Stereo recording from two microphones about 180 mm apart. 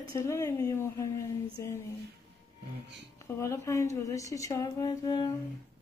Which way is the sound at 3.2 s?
15° left (ahead or behind).